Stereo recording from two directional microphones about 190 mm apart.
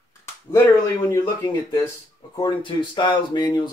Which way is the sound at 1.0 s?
20° left (ahead or behind).